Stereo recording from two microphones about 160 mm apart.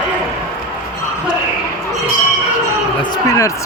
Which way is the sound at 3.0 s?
20° left (ahead or behind).